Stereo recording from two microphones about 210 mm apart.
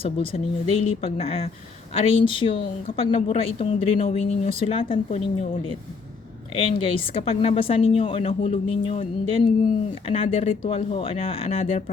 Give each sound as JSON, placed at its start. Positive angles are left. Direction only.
{"t": 0.0, "sound": "speech", "side_deg": 25}
{"t": 6.6, "sound": "speech", "side_deg": 25}